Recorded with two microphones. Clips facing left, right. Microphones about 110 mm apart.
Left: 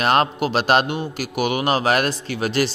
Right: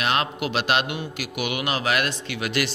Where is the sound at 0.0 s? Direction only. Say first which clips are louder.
Left 6 dB; 40° left (ahead or behind).